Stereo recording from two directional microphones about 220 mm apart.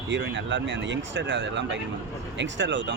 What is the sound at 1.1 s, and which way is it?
Speech, 55° right (ahead or behind).